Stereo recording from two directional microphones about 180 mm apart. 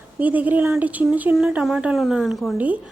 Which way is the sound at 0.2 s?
10° right (ahead or behind).